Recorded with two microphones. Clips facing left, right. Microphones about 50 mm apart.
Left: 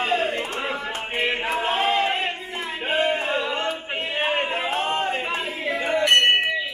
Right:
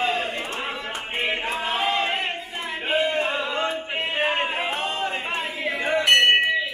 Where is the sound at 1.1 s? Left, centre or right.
Left.